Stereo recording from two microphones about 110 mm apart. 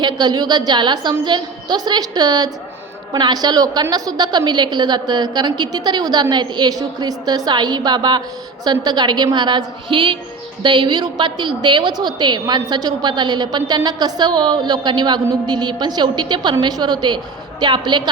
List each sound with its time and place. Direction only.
0.0 s a woman's voice: 40° right (ahead or behind)